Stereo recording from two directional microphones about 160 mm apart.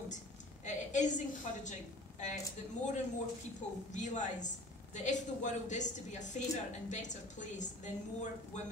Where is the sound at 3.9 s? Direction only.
50° left (ahead or behind).